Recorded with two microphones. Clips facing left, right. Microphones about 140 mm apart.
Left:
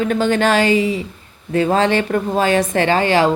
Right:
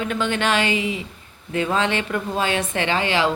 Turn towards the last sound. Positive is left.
turn(degrees=45)  # may be behind; listen again after turning